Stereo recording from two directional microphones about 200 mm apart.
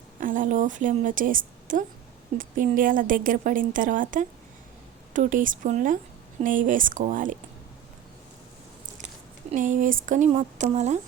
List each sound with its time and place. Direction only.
0.2 s a woman's voice: 40° right (ahead or behind)
9.5 s a woman's voice: 40° right (ahead or behind)